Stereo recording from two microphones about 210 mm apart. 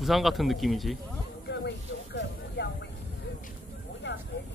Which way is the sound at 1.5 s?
50° left (ahead or behind).